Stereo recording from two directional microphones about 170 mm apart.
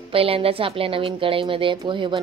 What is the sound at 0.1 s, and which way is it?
Speech, 35° right (ahead or behind).